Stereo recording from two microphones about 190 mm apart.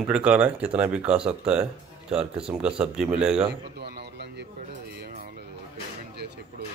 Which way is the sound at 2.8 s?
5° right (ahead or behind).